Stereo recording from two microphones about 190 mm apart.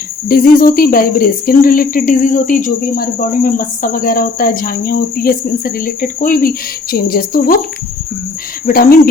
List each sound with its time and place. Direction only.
0.3 s speech: 50° left (ahead or behind)
8.6 s speech: 50° left (ahead or behind)